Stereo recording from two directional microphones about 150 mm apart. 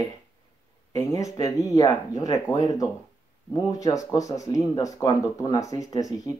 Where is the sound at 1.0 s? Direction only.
20° left (ahead or behind).